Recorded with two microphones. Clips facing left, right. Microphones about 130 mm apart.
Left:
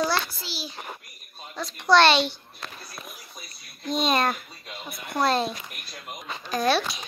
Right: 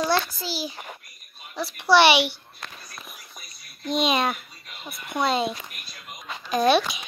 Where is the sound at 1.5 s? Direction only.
10° right (ahead or behind).